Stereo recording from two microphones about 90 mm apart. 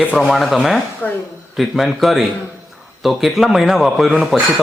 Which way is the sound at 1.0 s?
15° left (ahead or behind).